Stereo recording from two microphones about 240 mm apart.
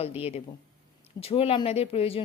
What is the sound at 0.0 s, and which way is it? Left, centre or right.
Speech, left.